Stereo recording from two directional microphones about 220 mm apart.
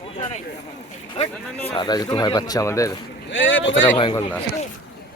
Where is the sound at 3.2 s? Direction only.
60° left (ahead or behind).